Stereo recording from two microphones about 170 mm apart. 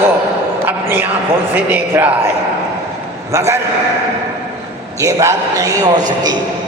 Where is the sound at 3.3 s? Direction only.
15° right (ahead or behind).